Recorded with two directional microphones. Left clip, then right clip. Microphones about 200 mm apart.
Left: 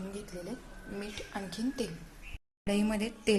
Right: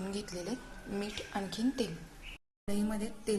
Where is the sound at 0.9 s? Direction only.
5° right (ahead or behind).